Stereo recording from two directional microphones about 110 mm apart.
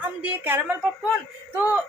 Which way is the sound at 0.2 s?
15° right (ahead or behind).